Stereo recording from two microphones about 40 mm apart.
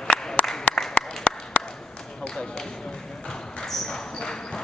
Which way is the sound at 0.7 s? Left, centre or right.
Left.